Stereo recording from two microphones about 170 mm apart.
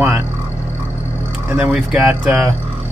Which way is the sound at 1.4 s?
5° right (ahead or behind).